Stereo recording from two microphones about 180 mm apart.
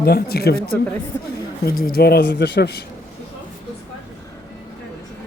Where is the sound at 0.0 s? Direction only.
60° left (ahead or behind).